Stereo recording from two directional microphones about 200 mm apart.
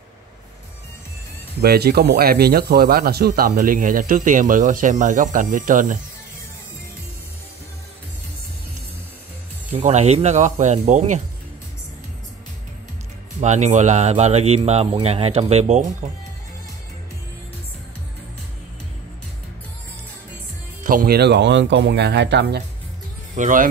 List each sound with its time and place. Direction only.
1.6 s speech: 50° right (ahead or behind)
9.7 s speech: 35° right (ahead or behind)
13.4 s speech: 35° right (ahead or behind)
20.8 s speech: 45° right (ahead or behind)
23.3 s speech: 40° right (ahead or behind)